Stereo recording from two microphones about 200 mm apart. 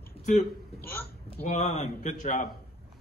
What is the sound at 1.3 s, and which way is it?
A man's voice, 35° left (ahead or behind).